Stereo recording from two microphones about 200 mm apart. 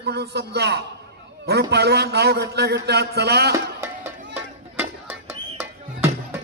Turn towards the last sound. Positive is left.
turn(degrees=-10)  # may be behind; listen again after turning